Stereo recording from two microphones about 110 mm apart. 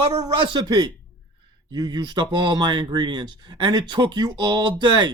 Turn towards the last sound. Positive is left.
turn(degrees=-45)  # may be behind; listen again after turning